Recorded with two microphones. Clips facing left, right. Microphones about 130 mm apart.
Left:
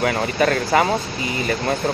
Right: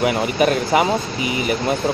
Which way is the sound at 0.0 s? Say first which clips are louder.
Right 2 dB; 15° right (ahead or behind).